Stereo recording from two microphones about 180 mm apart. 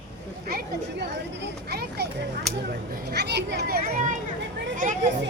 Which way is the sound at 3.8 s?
40° right (ahead or behind).